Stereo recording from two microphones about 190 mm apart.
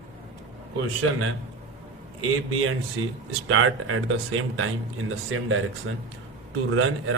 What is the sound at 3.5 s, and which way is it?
A man's voice, 90° right.